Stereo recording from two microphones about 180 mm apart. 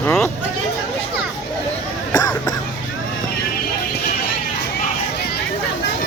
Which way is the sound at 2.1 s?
20° left (ahead or behind).